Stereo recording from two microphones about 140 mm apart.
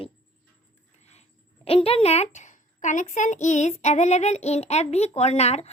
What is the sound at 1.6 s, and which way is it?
A child's voice, 45° left (ahead or behind).